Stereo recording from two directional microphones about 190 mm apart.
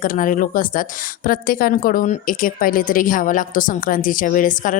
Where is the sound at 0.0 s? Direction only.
45° left (ahead or behind).